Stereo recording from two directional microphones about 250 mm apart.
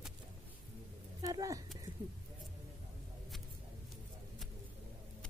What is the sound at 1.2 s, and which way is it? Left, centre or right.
Speech, centre.